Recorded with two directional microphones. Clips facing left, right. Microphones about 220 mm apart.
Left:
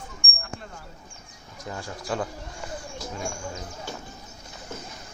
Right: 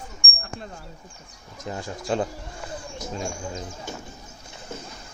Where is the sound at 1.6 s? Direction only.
25° right (ahead or behind).